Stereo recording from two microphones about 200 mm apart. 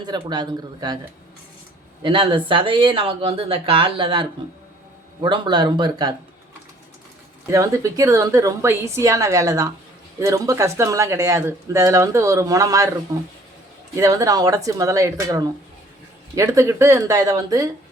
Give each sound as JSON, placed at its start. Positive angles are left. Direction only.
{"t": 0.0, "sound": "speech", "side_deg": -20}
{"t": 2.0, "sound": "speech", "side_deg": -25}
{"t": 7.5, "sound": "speech", "side_deg": -15}